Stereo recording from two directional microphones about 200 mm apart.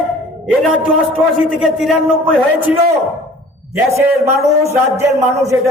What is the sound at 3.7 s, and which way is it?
A man's voice, 15° right (ahead or behind).